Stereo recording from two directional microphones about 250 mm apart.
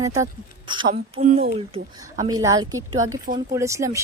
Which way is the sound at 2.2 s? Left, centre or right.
Centre.